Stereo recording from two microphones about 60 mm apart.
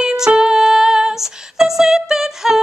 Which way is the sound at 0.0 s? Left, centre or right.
Centre.